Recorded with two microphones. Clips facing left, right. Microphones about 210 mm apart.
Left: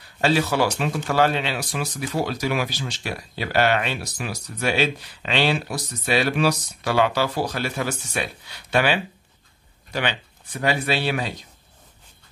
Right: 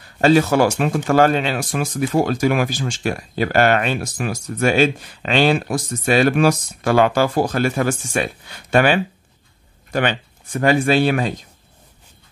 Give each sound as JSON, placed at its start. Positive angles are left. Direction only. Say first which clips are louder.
{"t": 0.0, "sound": "speech", "louder": "right 7 dB", "side_deg": -50}